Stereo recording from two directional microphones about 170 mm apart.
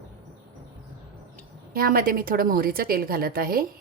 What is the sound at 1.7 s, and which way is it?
A woman's voice, 60° right (ahead or behind).